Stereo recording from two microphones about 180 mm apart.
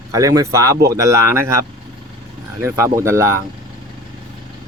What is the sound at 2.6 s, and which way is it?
Speech, 15° right (ahead or behind).